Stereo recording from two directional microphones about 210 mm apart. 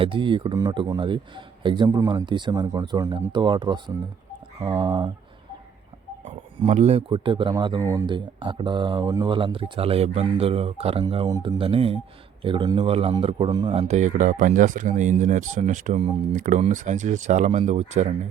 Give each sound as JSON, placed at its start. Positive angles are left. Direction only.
{"t": 0.0, "sound": "speech", "side_deg": -25}
{"t": 6.2, "sound": "speech", "side_deg": -30}